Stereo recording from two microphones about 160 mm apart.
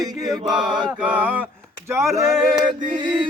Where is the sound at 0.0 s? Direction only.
25° right (ahead or behind).